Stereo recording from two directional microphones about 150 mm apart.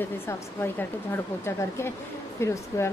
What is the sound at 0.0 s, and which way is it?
A woman's voice, 15° left (ahead or behind).